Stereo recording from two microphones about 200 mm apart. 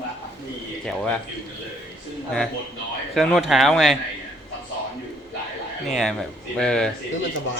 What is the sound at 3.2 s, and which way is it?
Speech, centre (ahead or behind).